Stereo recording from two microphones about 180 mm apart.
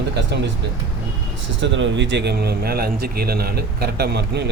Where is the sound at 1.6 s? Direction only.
90° right; by 4.4 s 65° right (ahead or behind).